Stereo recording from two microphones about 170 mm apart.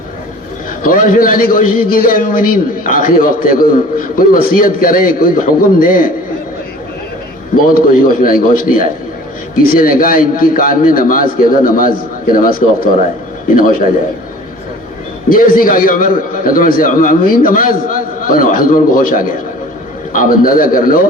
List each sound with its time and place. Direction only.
0.8 s a man's voice: 55° left (ahead or behind)
7.7 s a man's voice: 60° left (ahead or behind)
15.3 s a man's voice: 55° left (ahead or behind)